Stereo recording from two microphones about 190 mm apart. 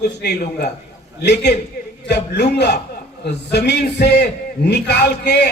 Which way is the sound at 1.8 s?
60° left (ahead or behind).